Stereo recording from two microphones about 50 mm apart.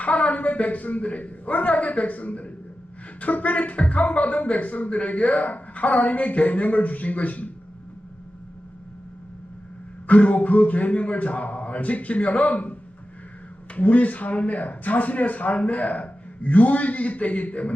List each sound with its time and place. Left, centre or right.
0.0 s speech: left
10.1 s speech: left
13.7 s speech: left